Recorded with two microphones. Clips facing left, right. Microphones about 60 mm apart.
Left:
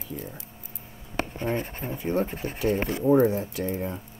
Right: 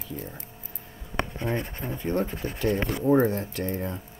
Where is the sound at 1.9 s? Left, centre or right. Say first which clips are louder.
Left 1 dB; centre.